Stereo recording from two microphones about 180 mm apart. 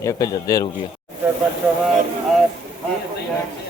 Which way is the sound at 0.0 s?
20° left (ahead or behind).